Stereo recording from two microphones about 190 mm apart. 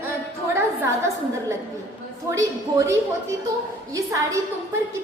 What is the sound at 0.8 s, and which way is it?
A woman's voice, 15° right (ahead or behind).